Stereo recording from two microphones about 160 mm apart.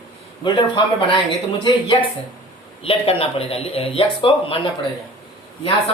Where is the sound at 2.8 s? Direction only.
35° left (ahead or behind).